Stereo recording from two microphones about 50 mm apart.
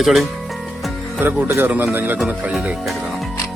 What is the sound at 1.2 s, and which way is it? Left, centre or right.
Speech, right.